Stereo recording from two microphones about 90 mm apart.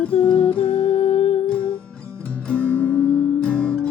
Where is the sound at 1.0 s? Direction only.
90° left.